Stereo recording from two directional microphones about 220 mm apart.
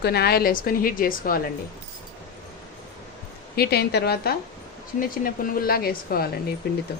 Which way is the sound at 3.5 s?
45° left (ahead or behind).